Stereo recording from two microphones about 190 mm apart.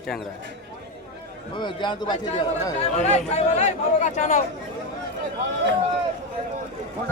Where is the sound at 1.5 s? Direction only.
25° left (ahead or behind).